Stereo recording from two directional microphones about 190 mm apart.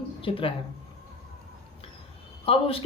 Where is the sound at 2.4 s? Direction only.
30° left (ahead or behind).